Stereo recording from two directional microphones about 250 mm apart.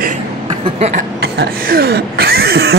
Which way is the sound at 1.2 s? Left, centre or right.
Right.